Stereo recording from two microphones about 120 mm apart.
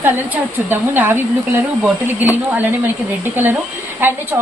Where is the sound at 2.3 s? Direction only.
15° right (ahead or behind).